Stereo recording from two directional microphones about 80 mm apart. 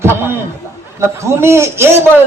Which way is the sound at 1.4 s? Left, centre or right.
Right.